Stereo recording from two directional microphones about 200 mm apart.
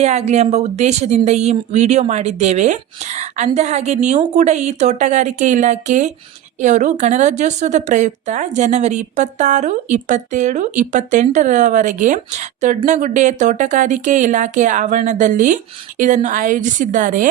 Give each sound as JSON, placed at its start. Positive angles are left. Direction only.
{"t": 0.0, "sound": "a woman's voice", "side_deg": -35}